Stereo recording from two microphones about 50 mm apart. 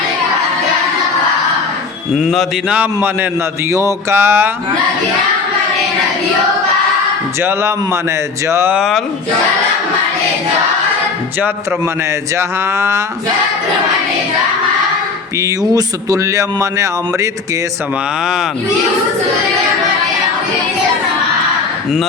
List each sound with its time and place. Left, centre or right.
2.1 s speech: centre
2.8 s a man's voice: right
3.7 s speech: right
4.1 s a man's voice: right
8.4 s speech: right
12.4 s speech: right
16.2 s speech: right